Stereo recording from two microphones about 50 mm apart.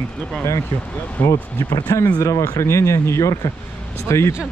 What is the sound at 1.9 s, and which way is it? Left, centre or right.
Speech, left.